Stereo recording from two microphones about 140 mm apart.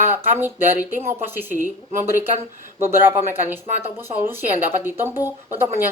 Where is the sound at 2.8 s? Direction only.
15° right (ahead or behind).